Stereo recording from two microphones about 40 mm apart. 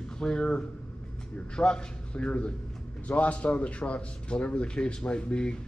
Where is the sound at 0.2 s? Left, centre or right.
Centre.